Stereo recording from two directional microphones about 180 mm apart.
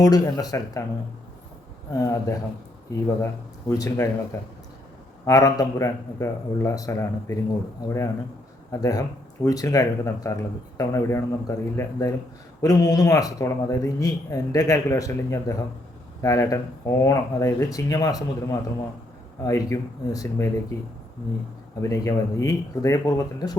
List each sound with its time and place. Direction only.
0.0 s speech: 20° left (ahead or behind)
1.9 s a man's voice: 20° left (ahead or behind)
3.7 s a man's voice: 15° left (ahead or behind)
21.8 s a man's voice: 20° left (ahead or behind)